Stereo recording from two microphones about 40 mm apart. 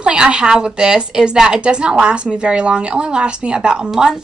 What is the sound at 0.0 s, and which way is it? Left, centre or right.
A woman's voice, right.